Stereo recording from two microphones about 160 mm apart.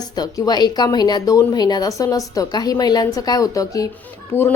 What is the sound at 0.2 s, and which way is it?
A woman's voice, 25° left (ahead or behind).